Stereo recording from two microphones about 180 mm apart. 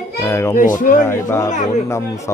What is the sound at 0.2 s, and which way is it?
Speech, 15° left (ahead or behind).